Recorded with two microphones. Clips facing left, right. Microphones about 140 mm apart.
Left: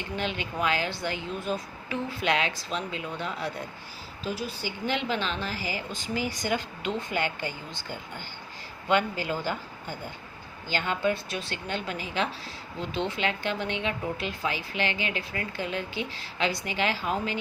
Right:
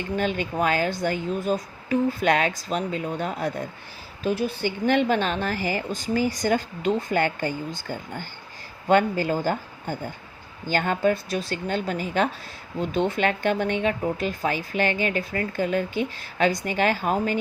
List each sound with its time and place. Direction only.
0.2 s speech: 45° right (ahead or behind)